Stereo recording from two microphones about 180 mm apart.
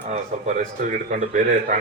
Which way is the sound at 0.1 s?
40° right (ahead or behind).